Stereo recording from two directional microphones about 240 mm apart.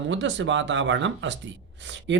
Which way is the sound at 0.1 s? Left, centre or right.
Right.